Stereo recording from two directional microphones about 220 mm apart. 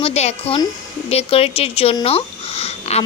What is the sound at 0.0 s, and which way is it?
Speech, 30° left (ahead or behind).